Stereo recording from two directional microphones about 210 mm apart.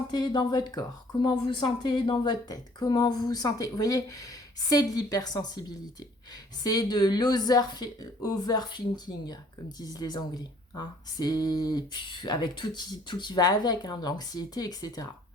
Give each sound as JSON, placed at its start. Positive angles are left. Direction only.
{"t": 0.1, "sound": "a woman's voice", "side_deg": 20}